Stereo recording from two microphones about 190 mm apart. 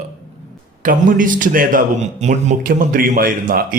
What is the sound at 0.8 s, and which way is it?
A man's voice, 45° right (ahead or behind).